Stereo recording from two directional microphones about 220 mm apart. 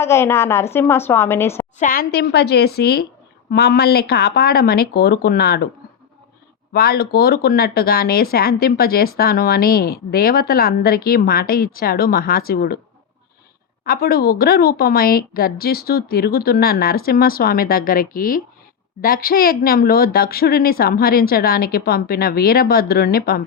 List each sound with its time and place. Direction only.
0.0 s a woman's voice: 10° left (ahead or behind)
1.8 s speech: 40° left (ahead or behind)
6.7 s speech: 45° left (ahead or behind)
13.8 s speech: 45° left (ahead or behind)